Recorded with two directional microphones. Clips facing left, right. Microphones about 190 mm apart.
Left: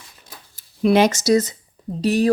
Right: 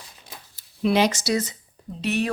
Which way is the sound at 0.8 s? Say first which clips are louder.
Left 5 dB; 50° left (ahead or behind).